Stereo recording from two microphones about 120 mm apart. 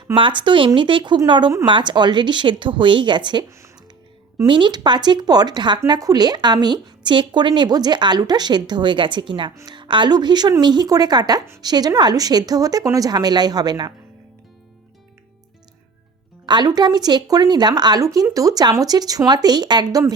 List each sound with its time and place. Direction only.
0.1 s speech: 40° right (ahead or behind)
4.4 s speech: 40° right (ahead or behind)
16.5 s speech: 35° right (ahead or behind)